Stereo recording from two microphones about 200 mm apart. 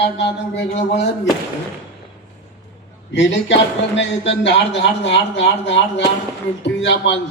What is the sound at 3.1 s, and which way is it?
Music, 65° left (ahead or behind).